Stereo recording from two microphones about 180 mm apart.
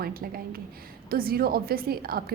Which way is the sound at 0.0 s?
55° right (ahead or behind).